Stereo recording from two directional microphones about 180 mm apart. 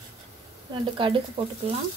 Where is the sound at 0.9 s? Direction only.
30° right (ahead or behind).